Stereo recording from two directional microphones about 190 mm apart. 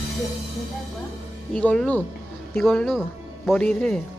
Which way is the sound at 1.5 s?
5° left (ahead or behind).